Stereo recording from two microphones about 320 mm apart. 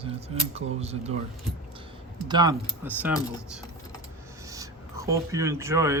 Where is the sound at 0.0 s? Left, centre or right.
Centre.